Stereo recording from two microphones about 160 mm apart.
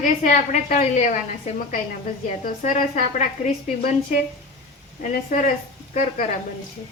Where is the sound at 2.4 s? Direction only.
55° left (ahead or behind).